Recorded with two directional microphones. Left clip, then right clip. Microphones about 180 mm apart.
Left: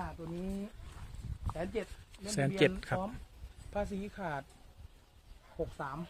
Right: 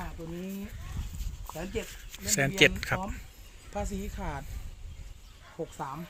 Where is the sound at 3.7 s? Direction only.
60° right (ahead or behind).